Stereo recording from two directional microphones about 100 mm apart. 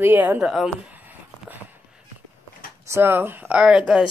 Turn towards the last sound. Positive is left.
turn(degrees=-5)  # may be behind; listen again after turning